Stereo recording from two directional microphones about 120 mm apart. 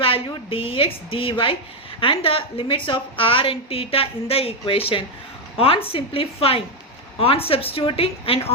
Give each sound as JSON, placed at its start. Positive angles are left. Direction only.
{"t": 0.5, "sound": "a woman's voice", "side_deg": 50}